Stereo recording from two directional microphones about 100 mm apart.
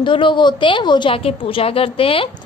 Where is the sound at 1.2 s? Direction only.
70° left (ahead or behind).